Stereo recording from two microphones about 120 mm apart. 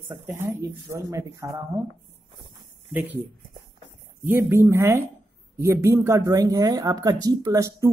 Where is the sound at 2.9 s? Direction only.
15° right (ahead or behind).